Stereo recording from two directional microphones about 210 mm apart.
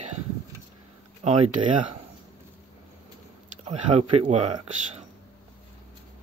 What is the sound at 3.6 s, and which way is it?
Speech, 30° right (ahead or behind).